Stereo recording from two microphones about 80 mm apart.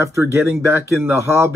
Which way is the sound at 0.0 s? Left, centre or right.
Right.